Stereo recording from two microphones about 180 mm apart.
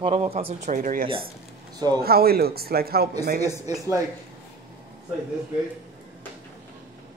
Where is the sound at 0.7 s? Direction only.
50° right (ahead or behind).